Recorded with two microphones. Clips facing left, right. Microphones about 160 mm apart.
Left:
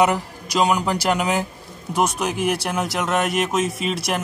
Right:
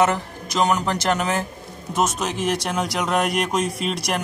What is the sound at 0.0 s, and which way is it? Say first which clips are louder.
A man's voice: left 1 dB; 15° left (ahead or behind).